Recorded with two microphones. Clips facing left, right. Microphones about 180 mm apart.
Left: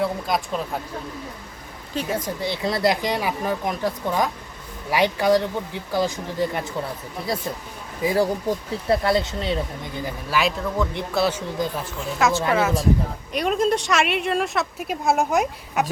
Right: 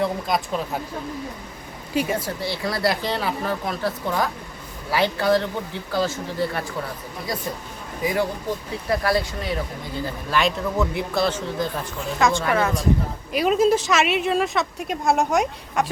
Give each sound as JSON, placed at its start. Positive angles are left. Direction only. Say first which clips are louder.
{"t": 0.0, "sound": "a woman's voice", "louder": "even", "side_deg": 0}
{"t": 2.0, "sound": "speech", "louder": "right 2 dB", "side_deg": -10}
{"t": 2.4, "sound": "speech", "louder": "left 5 dB", "side_deg": 20}
{"t": 8.0, "sound": "speech", "louder": "left 3 dB", "side_deg": 30}
{"t": 10.8, "sound": "a woman's voice", "louder": "right 1 dB", "side_deg": -5}
{"t": 11.2, "sound": "a woman's voice", "louder": "left 1 dB", "side_deg": 10}